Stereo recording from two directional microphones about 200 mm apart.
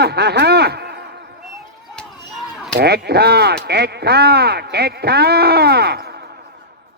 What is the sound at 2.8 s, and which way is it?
Speech, 55° right (ahead or behind).